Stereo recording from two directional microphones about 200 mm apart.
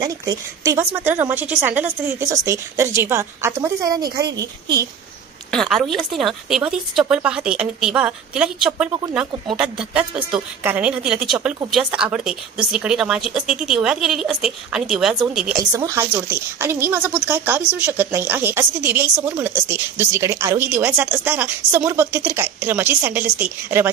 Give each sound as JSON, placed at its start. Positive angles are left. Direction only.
{"t": 0.0, "sound": "speech", "side_deg": -15}
{"t": 5.5, "sound": "a woman's voice", "side_deg": 0}
{"t": 15.7, "sound": "speech", "side_deg": -15}